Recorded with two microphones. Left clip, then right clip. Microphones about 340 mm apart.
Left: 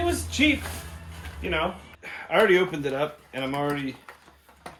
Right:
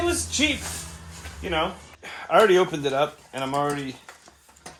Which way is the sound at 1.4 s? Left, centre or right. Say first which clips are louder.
Right 1 dB; centre.